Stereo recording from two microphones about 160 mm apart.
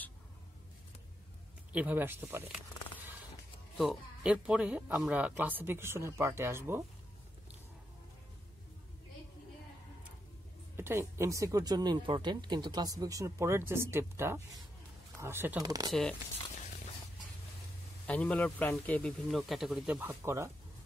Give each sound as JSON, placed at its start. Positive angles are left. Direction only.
{"t": 1.7, "sound": "speech", "side_deg": -10}
{"t": 3.7, "sound": "speech", "side_deg": 0}
{"t": 10.8, "sound": "speech", "side_deg": -15}
{"t": 15.6, "sound": "speech", "side_deg": -25}
{"t": 15.9, "sound": "speech", "side_deg": 5}
{"t": 18.0, "sound": "a man's voice", "side_deg": 10}
{"t": 20.0, "sound": "speech", "side_deg": -15}